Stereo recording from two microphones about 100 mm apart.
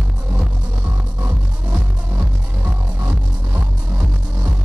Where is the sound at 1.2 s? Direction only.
15° right (ahead or behind).